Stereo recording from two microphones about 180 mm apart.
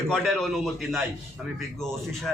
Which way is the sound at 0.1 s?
Centre (ahead or behind).